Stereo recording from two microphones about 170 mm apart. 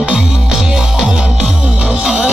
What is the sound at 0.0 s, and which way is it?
Music, 5° right (ahead or behind).